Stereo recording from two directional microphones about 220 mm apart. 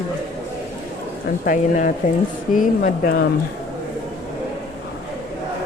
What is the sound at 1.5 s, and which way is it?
Speech, 40° left (ahead or behind).